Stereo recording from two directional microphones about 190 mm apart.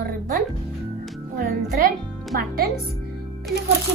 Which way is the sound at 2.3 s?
50° right (ahead or behind).